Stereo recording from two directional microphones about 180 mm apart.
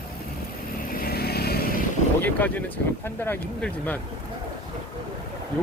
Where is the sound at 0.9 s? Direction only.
55° left (ahead or behind).